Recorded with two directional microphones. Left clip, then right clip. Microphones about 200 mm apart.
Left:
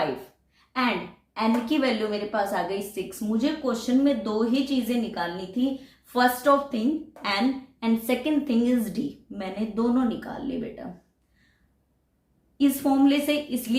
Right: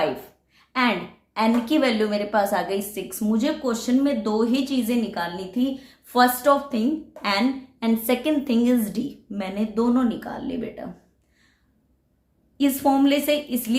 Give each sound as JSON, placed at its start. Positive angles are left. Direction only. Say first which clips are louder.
{"t": 0.5, "sound": "a woman's voice", "louder": "right 4 dB", "side_deg": -45}
{"t": 12.5, "sound": "a woman's voice", "louder": "right 3 dB", "side_deg": -35}